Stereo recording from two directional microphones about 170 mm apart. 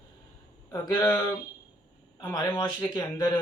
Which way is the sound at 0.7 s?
20° left (ahead or behind).